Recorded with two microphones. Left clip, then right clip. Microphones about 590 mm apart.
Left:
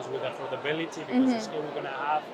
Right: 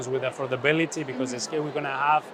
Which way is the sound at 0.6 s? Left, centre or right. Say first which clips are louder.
Right 10 dB; right.